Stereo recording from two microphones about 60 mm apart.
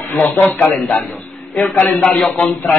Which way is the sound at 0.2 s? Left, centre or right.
Left.